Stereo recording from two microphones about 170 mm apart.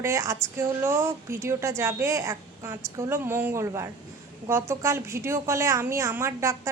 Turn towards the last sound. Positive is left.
turn(degrees=-15)  # may be behind; listen again after turning